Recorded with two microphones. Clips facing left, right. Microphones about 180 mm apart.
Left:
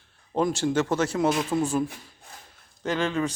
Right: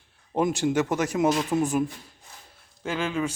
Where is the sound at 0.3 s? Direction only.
15° right (ahead or behind).